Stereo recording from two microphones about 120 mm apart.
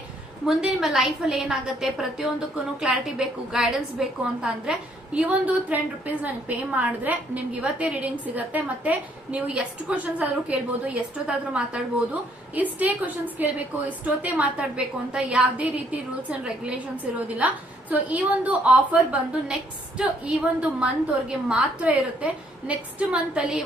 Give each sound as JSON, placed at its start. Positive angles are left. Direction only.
{"t": 0.4, "sound": "a woman's voice", "side_deg": -5}